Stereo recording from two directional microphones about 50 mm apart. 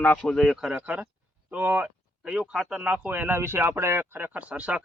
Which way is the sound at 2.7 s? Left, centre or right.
Right.